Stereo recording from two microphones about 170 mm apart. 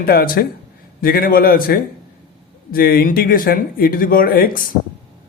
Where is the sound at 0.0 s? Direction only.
60° left (ahead or behind).